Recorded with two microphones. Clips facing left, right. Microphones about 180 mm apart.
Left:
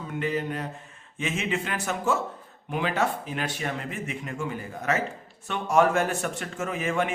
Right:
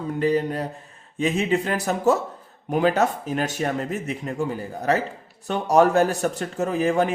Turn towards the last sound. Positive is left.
turn(degrees=-35)  # may be behind; listen again after turning